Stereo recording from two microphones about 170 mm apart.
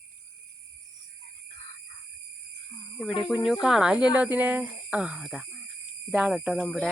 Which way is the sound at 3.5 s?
Centre (ahead or behind).